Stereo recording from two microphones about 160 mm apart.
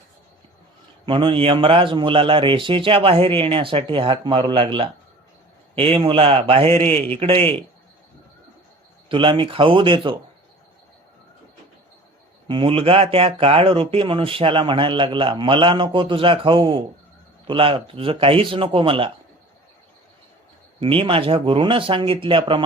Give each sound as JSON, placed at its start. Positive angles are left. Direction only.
{"t": 1.0, "sound": "speech", "side_deg": -30}
{"t": 9.0, "sound": "speech", "side_deg": -30}
{"t": 12.5, "sound": "speech", "side_deg": -35}
{"t": 20.7, "sound": "speech", "side_deg": -35}